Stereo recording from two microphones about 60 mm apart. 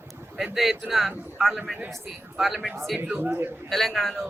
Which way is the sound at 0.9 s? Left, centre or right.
Centre.